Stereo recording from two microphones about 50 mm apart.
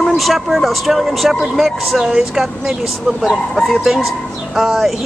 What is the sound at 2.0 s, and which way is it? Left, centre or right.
Speech, centre.